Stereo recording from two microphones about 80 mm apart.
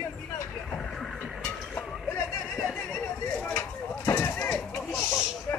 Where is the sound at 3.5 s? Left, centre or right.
Left.